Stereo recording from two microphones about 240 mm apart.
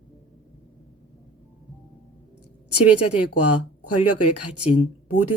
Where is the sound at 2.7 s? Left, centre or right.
Left.